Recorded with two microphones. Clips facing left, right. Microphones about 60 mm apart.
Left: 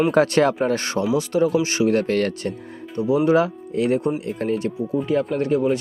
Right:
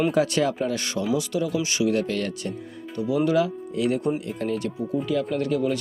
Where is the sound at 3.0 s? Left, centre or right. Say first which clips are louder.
Left 4 dB; left.